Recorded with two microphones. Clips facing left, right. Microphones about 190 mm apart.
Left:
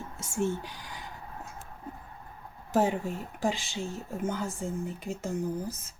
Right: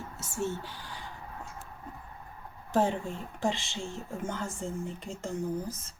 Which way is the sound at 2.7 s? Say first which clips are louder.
Left 1 dB; 10° left (ahead or behind).